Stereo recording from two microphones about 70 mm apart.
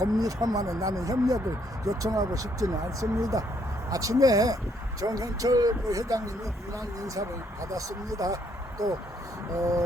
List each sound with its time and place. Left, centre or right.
0.0 s speech: right